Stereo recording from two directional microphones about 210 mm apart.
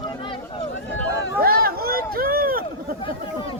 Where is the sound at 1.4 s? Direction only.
45° right (ahead or behind).